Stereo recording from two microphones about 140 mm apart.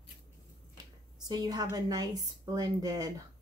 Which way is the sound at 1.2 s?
25° right (ahead or behind).